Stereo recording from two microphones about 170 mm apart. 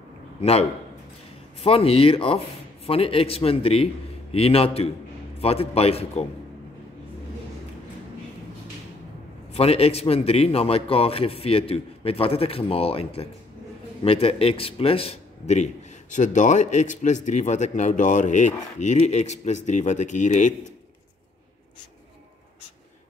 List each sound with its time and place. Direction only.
0.4 s a man's voice: 35° left (ahead or behind)
9.5 s a man's voice: 35° left (ahead or behind)